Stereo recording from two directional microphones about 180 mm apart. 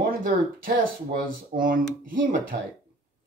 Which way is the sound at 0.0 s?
50° right (ahead or behind).